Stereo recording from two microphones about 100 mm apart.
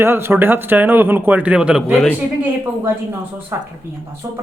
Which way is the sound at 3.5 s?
25° right (ahead or behind).